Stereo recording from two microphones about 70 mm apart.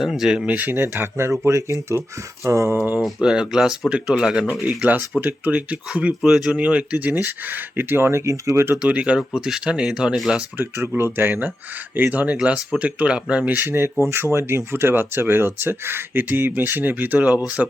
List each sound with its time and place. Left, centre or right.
0.0 s speech: centre
0.5 s speech: right
0.9 s speech: right
3.2 s speech: centre
4.8 s speech: right
6.2 s speech: centre
6.5 s speech: centre; by 8.8 s right
8.8 s speech: centre
10.8 s speech: right